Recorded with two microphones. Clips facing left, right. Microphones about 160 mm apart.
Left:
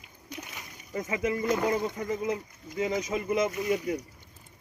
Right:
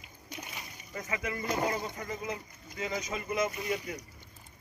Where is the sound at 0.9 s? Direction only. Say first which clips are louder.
Left 7 dB; 25° left (ahead or behind).